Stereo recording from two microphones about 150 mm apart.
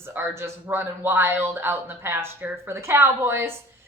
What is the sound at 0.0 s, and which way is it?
A woman's voice, 15° right (ahead or behind).